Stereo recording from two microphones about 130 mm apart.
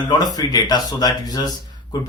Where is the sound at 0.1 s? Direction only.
30° left (ahead or behind).